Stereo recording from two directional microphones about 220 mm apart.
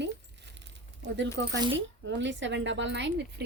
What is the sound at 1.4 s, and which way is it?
A woman's voice, 55° right (ahead or behind).